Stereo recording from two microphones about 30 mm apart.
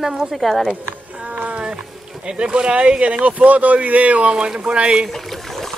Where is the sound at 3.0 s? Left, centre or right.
Right.